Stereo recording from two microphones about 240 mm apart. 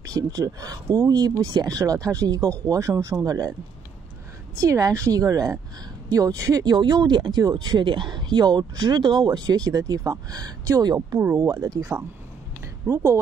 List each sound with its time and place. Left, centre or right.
0.1 s speech: centre
4.6 s speech: centre